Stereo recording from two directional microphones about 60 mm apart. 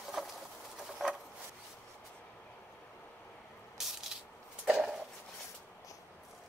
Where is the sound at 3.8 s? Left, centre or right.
Centre.